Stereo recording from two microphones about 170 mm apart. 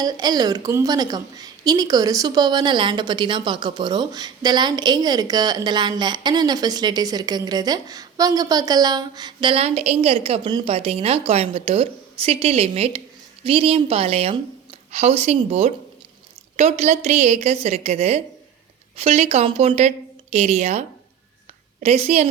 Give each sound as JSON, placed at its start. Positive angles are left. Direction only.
{"t": 0.0, "sound": "a woman's voice", "side_deg": -25}